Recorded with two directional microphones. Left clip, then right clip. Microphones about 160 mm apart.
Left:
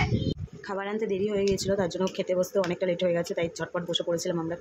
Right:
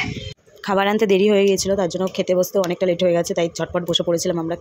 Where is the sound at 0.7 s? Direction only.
55° right (ahead or behind).